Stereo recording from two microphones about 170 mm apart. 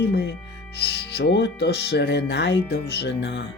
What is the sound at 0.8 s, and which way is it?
Speech, 80° left.